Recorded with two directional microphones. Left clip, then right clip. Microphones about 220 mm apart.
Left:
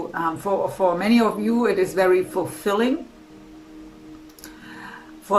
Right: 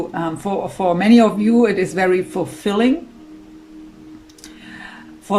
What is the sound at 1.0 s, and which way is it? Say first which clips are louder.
Speech: right 6 dB; 30° right (ahead or behind).